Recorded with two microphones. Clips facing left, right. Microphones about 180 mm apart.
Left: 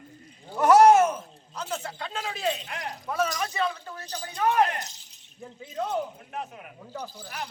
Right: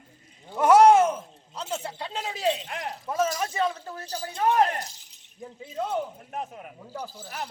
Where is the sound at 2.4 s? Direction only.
30° right (ahead or behind).